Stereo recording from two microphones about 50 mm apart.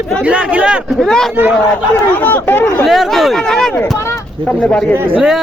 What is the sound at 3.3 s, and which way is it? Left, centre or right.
Speech, centre.